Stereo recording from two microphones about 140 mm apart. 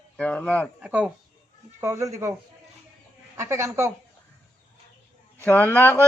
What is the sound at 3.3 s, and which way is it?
Speech, 20° right (ahead or behind).